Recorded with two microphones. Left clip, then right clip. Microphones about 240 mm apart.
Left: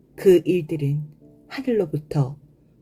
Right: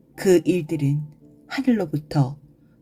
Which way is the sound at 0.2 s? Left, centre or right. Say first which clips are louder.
Left 2 dB; right.